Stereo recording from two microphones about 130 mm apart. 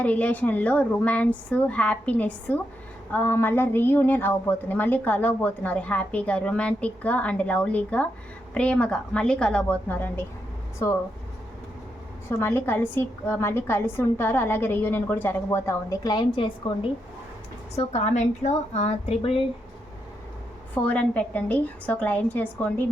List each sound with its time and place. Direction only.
0.0 s a woman's voice: 10° left (ahead or behind)
12.4 s a woman's voice: 20° left (ahead or behind); by 16.9 s 45° left (ahead or behind)
17.7 s a woman's voice: 60° left (ahead or behind)
20.8 s a woman's voice: 10° left (ahead or behind)